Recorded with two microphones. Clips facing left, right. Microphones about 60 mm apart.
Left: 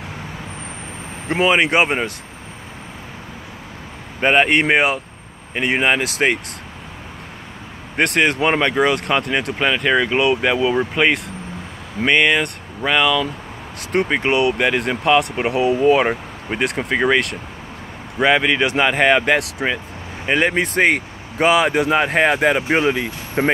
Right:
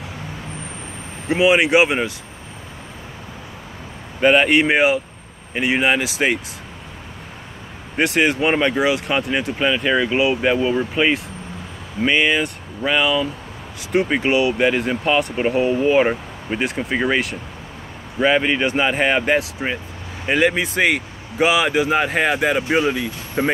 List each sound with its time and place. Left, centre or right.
1.3 s speech: left
4.2 s speech: left
8.0 s speech: left
13.9 s speech: left
20.2 s speech: left